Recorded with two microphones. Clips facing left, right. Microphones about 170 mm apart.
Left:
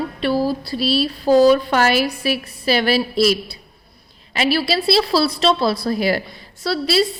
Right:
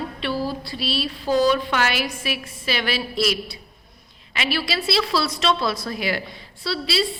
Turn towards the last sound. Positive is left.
turn(degrees=45)  # may be behind; listen again after turning